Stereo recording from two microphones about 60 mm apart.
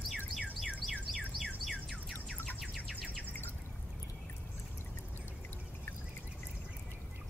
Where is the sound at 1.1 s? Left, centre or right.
Centre.